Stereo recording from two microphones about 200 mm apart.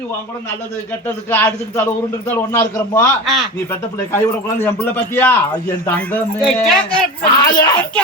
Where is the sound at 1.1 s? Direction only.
10° left (ahead or behind).